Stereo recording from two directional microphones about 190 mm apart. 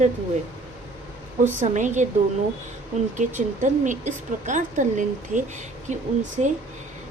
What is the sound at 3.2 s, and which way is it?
Speech, 40° right (ahead or behind).